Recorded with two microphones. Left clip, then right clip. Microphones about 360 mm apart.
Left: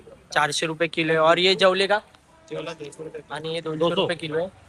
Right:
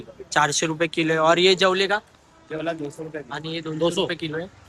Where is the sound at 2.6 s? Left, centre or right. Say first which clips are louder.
Right 8 dB; right.